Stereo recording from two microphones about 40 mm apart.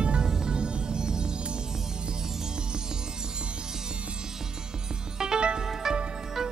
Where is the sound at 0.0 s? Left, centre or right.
Right.